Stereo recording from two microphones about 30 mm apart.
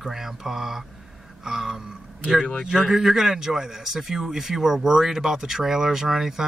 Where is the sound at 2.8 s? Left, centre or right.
Centre.